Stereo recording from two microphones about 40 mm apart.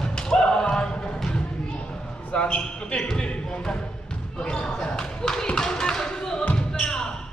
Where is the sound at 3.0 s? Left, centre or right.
Centre.